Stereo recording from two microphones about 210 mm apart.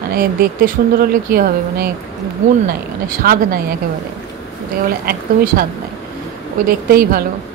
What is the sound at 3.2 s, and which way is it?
Speech, 45° right (ahead or behind).